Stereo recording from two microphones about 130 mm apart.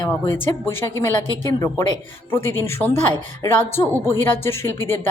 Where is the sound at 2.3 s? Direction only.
20° left (ahead or behind).